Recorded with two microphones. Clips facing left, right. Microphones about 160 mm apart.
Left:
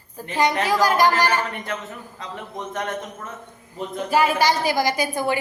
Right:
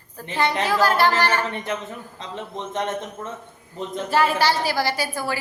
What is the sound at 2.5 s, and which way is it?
Speech, 25° right (ahead or behind).